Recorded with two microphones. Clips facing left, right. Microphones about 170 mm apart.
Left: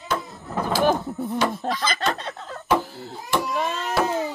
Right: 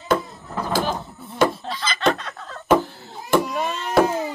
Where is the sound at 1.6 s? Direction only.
50° left (ahead or behind).